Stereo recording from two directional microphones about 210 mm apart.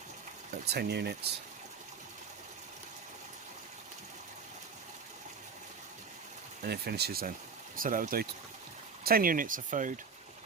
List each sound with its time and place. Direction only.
0.5 s speech: 50° right (ahead or behind)
6.6 s speech: 50° right (ahead or behind)